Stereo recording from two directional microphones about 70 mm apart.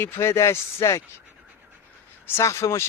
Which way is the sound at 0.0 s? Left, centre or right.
Left.